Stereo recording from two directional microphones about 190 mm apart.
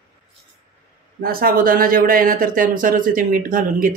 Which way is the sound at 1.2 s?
50° right (ahead or behind).